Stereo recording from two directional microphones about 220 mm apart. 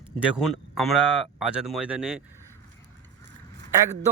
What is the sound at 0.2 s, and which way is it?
Speech, 5° right (ahead or behind).